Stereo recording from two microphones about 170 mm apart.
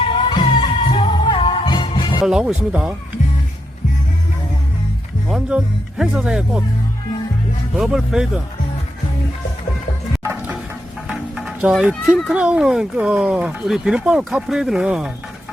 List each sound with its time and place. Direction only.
0.0 s music: 30° left (ahead or behind)
2.2 s speech: 5° right (ahead or behind)
5.3 s speech: 5° right (ahead or behind)
7.8 s speech: centre (ahead or behind)
10.2 s music: 10° right (ahead or behind)
11.3 s speech: 5° right (ahead or behind)